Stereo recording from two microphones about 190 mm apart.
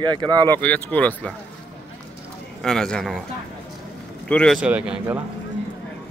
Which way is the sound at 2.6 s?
5° left (ahead or behind).